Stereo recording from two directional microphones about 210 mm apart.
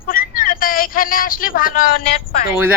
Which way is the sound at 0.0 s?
40° left (ahead or behind).